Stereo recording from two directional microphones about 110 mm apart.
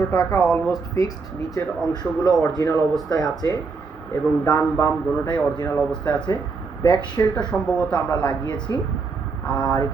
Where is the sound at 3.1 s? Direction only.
35° left (ahead or behind).